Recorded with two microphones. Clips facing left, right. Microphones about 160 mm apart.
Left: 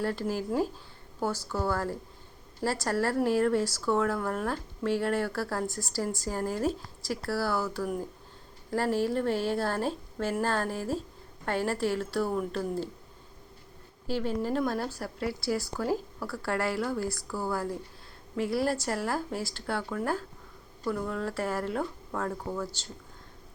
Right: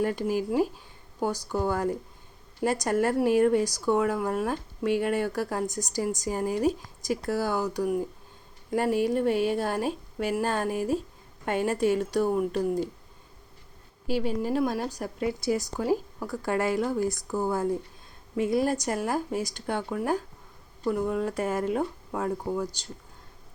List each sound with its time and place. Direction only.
0.0 s speech: 15° right (ahead or behind)
14.1 s speech: 10° right (ahead or behind)